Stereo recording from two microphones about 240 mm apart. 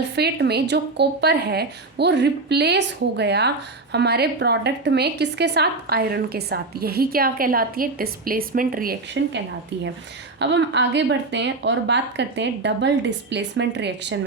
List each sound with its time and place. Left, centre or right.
0.2 s a woman's voice: right
10.4 s a woman's voice: right